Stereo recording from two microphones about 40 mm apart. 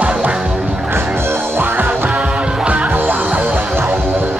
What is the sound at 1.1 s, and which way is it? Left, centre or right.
Music, right.